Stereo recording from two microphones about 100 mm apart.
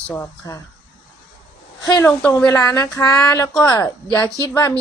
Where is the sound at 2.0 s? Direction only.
15° left (ahead or behind).